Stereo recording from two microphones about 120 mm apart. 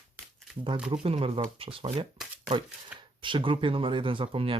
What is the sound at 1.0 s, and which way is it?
Speech, 50° right (ahead or behind).